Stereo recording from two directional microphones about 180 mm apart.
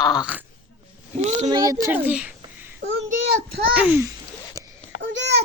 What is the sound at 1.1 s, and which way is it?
Speech, 40° right (ahead or behind).